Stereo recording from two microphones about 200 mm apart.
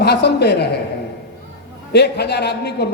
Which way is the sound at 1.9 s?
55° left (ahead or behind).